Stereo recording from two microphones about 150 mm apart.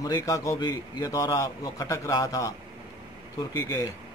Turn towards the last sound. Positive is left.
turn(degrees=25)  # may be behind; listen again after turning